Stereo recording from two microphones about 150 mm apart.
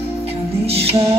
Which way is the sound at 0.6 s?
40° right (ahead or behind).